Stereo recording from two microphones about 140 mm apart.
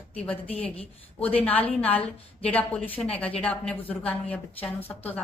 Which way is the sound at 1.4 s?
10° left (ahead or behind).